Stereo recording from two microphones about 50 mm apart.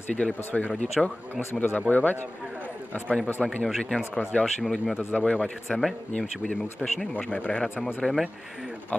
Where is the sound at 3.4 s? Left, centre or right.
Centre.